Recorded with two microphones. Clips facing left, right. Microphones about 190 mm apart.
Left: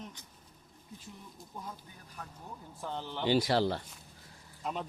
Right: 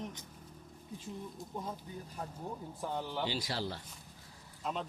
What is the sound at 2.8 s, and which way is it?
Speech, 10° right (ahead or behind).